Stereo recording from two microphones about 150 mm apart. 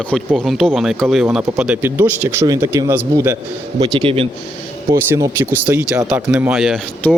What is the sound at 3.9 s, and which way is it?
Speech, 40° right (ahead or behind).